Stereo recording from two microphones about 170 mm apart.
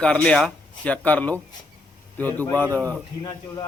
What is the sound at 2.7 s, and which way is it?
Speech, 20° right (ahead or behind).